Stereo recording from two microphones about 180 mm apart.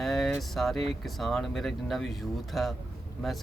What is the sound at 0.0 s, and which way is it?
Speech, centre (ahead or behind).